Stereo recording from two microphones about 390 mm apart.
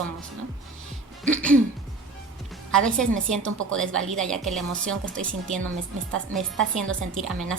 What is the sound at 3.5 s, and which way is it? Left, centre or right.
Speech, right.